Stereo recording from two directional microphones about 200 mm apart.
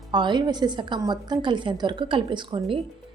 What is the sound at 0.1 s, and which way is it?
A woman's voice, 20° right (ahead or behind).